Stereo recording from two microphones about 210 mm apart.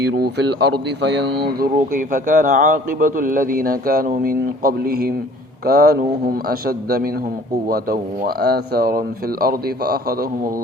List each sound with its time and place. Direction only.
0.2 s a man's voice: 55° right (ahead or behind)